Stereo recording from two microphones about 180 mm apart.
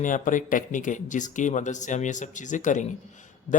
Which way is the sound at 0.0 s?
45° left (ahead or behind).